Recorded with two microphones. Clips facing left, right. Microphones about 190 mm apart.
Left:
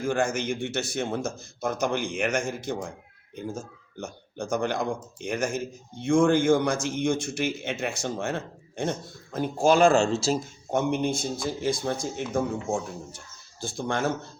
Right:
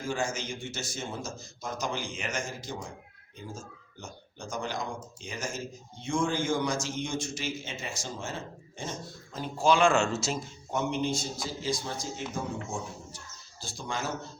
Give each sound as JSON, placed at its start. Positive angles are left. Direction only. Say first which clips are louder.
{"t": 0.0, "sound": "speech", "louder": "left 6 dB", "side_deg": 60}
{"t": 4.0, "sound": "speech", "louder": "left 9 dB", "side_deg": 60}
{"t": 10.7, "sound": "speech", "louder": "left 5 dB", "side_deg": 55}